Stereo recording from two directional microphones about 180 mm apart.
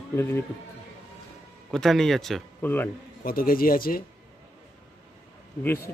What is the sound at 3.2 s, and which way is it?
Speech, 55° left (ahead or behind).